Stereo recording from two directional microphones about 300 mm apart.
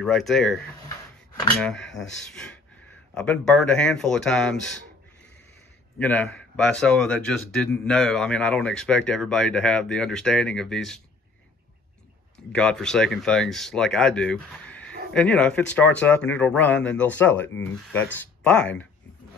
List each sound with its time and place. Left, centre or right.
0.0 s speech: centre
5.9 s speech: centre
12.5 s speech: centre